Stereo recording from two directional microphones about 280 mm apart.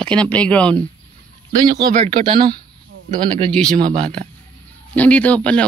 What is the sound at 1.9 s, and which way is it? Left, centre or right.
Speech, right.